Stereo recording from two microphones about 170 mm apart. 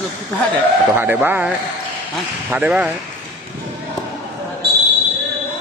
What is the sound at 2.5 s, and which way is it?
Speech, 10° right (ahead or behind).